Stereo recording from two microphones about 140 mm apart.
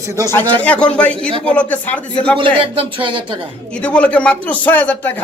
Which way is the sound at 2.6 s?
40° right (ahead or behind).